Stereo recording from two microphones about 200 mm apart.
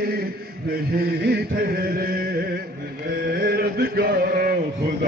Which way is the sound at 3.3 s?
50° right (ahead or behind).